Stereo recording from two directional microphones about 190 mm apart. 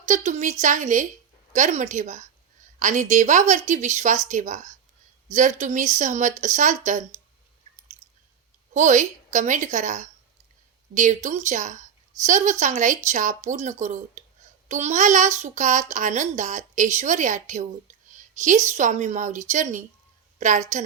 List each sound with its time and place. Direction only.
0.1 s a woman's voice: 35° right (ahead or behind)
8.7 s a woman's voice: 40° right (ahead or behind)